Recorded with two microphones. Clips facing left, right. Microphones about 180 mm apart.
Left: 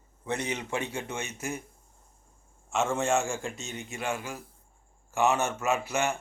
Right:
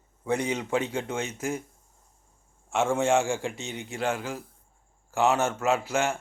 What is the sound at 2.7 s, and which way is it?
A man's voice, 10° right (ahead or behind).